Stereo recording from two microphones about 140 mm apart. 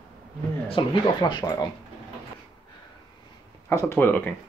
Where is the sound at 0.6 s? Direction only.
35° left (ahead or behind).